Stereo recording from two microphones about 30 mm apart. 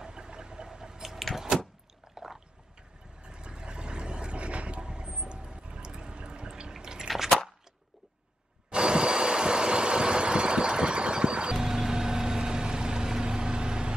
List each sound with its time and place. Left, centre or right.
0.0 s a sound: right
1.3 s vehicle: centre
2.2 s a sound: centre
3.2 s vehicle: right
6.7 s drip: right
8.6 s vehicle: right
11.5 s vehicle: centre